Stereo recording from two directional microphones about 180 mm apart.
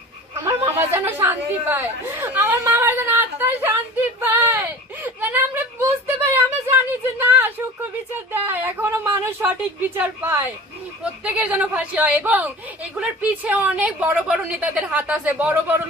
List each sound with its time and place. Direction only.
0.4 s chatter: 15° right (ahead or behind)
4.2 s a sound: 10° right (ahead or behind)
8.3 s a woman's voice: 10° right (ahead or behind)